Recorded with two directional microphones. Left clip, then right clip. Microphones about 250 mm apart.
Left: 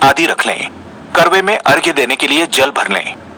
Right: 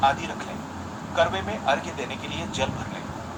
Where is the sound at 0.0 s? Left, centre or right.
Left.